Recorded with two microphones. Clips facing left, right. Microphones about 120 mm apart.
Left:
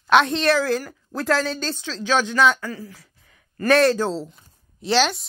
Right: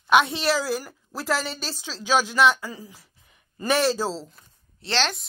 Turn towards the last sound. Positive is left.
turn(degrees=5)  # may be behind; listen again after turning